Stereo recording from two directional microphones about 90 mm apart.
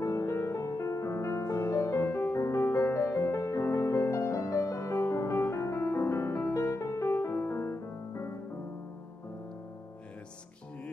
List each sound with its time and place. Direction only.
0.0 s music: 35° left (ahead or behind)